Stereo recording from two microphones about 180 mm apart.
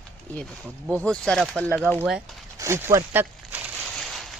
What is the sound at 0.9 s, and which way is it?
Speech, 5° left (ahead or behind).